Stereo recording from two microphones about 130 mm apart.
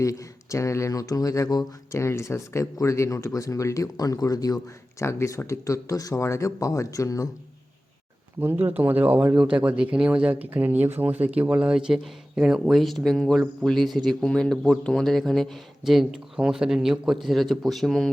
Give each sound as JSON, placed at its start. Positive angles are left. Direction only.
{"t": 0.0, "sound": "speech", "side_deg": 25}
{"t": 8.4, "sound": "speech", "side_deg": -20}